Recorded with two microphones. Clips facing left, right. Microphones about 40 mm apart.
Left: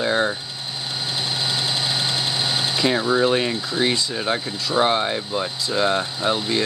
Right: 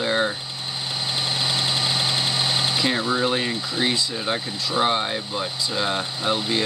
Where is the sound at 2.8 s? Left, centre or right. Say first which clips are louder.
Left 6 dB; centre.